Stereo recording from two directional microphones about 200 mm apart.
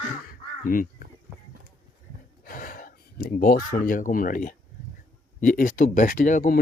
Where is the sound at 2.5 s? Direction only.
45° left (ahead or behind).